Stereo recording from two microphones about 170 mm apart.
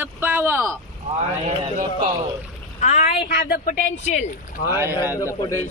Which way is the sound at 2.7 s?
45° left (ahead or behind).